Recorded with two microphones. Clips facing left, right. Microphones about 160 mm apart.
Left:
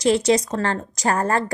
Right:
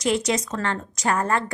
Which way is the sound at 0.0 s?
35° left (ahead or behind).